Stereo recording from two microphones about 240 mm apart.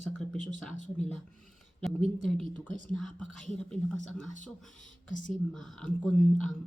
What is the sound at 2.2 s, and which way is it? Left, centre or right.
A woman's voice, centre.